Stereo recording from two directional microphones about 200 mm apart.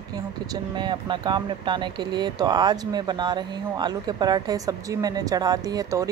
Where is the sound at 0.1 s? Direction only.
20° right (ahead or behind).